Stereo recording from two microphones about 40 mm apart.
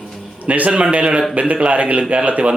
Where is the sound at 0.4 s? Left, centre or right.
Right.